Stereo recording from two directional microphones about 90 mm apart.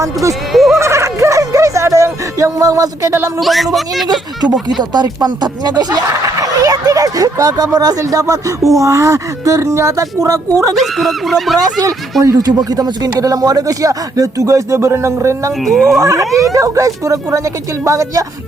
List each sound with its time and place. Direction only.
0.0 s speech: 35° right (ahead or behind)
0.5 s a sound: centre (ahead or behind)
0.8 s a sound: 30° right (ahead or behind)
3.4 s speech: centre (ahead or behind)
4.8 s speech: 50° right (ahead or behind)
10.8 s speech: centre (ahead or behind)
12.2 s speech: 45° right (ahead or behind)
15.6 s speech: centre (ahead or behind)
16.0 s speech: 35° right (ahead or behind)